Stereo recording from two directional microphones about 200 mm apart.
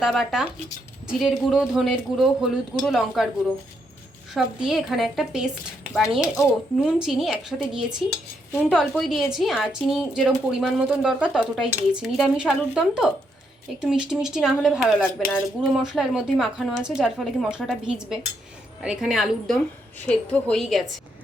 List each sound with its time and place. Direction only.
0.0 s a woman's voice: centre (ahead or behind)
4.4 s a woman's voice: centre (ahead or behind)
6.2 s speech: 15° left (ahead or behind)
7.0 s a woman's voice: centre (ahead or behind)